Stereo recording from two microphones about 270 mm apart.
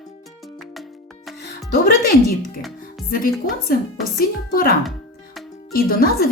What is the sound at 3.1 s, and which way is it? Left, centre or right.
Speech, left.